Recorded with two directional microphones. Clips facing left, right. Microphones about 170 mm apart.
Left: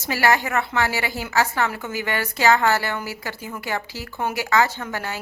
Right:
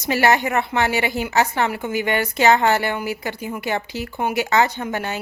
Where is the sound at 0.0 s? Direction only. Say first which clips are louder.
Right 3 dB; 20° right (ahead or behind).